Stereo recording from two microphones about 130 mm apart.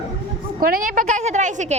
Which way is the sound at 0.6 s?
90° right.